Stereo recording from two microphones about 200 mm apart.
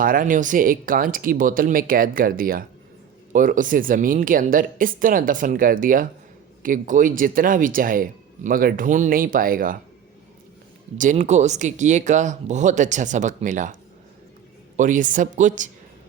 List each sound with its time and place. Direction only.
0.0 s speech: 45° right (ahead or behind)
10.9 s speech: 40° right (ahead or behind)
14.8 s speech: 40° right (ahead or behind)